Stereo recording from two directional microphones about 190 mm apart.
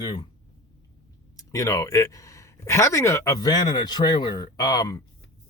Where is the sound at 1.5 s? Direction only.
15° left (ahead or behind).